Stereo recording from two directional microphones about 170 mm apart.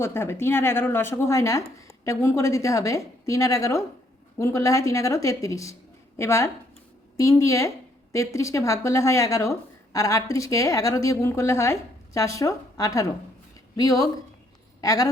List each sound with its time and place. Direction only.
0.0 s a woman's voice: 15° left (ahead or behind)